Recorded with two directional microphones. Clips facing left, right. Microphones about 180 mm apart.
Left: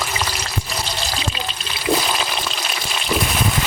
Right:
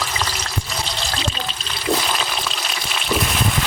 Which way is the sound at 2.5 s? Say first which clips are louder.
Left 1 dB; centre (ahead or behind).